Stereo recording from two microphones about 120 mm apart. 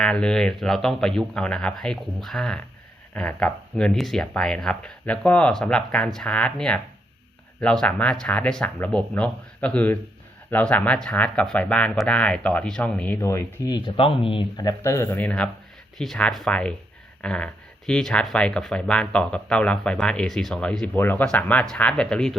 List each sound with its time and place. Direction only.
0.0 s speech: 5° left (ahead or behind)
13.2 s speech: 30° left (ahead or behind)
14.8 s speech: 20° left (ahead or behind); by 22.4 s 5° left (ahead or behind)